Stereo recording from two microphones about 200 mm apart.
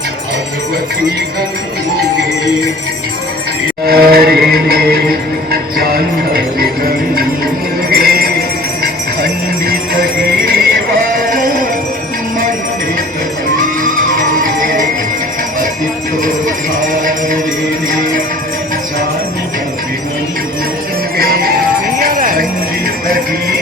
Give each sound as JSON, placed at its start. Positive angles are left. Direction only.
{"t": 3.8, "sound": "music", "side_deg": -50}
{"t": 8.8, "sound": "jingle bell", "side_deg": -45}
{"t": 13.8, "sound": "music", "side_deg": -45}
{"t": 16.8, "sound": "music", "side_deg": -40}
{"t": 21.2, "sound": "music", "side_deg": -50}
{"t": 21.9, "sound": "jingle bell", "side_deg": -45}
{"t": 23.0, "sound": "music", "side_deg": -45}